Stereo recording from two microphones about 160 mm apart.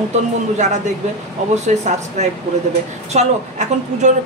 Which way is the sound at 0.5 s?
45° right (ahead or behind).